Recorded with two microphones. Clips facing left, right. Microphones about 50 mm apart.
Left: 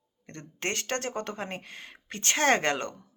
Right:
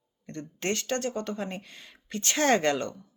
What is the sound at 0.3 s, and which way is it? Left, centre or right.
Speech, left.